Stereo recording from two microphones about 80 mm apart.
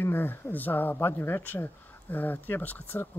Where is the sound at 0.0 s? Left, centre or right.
Left.